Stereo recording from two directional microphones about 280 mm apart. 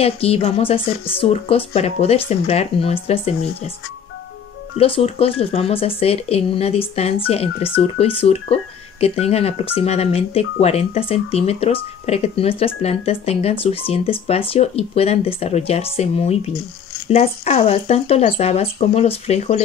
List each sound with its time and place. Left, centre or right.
0.0 s speech: left
4.7 s speech: centre